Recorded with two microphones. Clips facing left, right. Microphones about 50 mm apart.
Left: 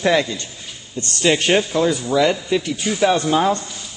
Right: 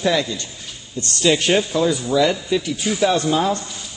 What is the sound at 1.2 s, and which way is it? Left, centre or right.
Speech, left.